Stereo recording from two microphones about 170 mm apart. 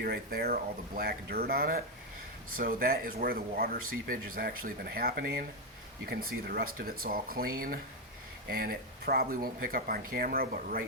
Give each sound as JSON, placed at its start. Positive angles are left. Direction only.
{"t": 0.0, "sound": "speech", "side_deg": -65}